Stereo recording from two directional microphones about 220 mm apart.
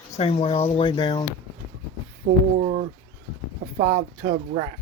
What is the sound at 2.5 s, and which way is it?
Speech, 30° right (ahead or behind).